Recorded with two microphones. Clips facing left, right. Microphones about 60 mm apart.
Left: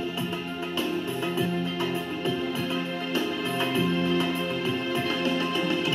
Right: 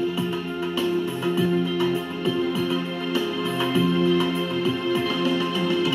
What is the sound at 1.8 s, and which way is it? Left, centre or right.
Music, left.